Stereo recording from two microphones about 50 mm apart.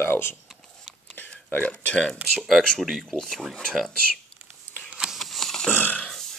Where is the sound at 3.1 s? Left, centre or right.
Centre.